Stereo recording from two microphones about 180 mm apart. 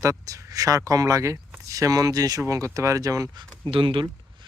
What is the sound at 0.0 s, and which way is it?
Speech, 15° right (ahead or behind).